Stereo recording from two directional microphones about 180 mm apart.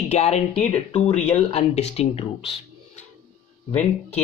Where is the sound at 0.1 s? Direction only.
35° left (ahead or behind).